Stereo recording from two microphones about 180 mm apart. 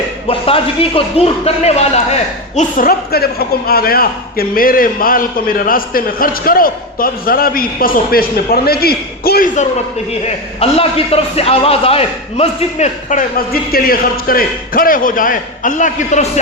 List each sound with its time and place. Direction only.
0.3 s a man's voice: 30° left (ahead or behind)
2.6 s a man's voice: 50° left (ahead or behind)
10.2 s a man's voice: 35° left (ahead or behind)